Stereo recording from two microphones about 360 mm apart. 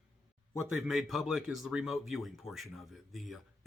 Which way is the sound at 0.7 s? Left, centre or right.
Centre.